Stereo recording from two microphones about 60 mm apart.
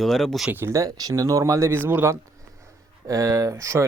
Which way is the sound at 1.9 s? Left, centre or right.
Right.